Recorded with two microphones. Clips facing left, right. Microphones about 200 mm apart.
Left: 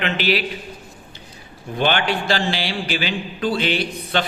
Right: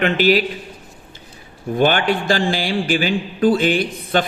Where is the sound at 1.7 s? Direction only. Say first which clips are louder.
Right 4 dB; 45° right (ahead or behind).